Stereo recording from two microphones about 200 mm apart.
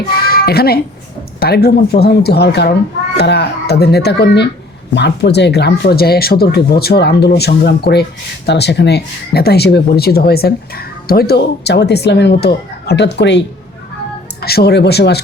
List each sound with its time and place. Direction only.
0.3 s child singing: 50° left (ahead or behind)
1.4 s speech: 50° left (ahead or behind)
14.4 s speech: 50° left (ahead or behind)